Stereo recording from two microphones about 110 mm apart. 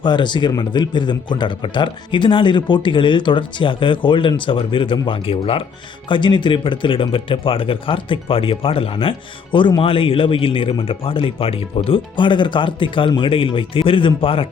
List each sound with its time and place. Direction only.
0.0 s speech: 45° left (ahead or behind)
6.1 s speech: 45° left (ahead or behind)